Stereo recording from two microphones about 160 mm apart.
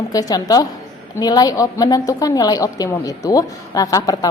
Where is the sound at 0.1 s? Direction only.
25° left (ahead or behind).